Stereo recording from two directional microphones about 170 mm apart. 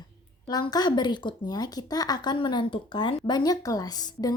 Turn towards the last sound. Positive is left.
turn(degrees=25)  # may be behind; listen again after turning